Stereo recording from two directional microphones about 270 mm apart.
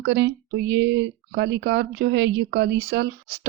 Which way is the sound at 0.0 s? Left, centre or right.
Right.